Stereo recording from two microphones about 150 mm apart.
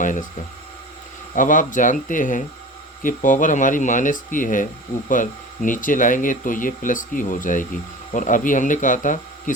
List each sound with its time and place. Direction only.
0.0 s speech: 60° left (ahead or behind)
1.4 s speech: 60° left (ahead or behind)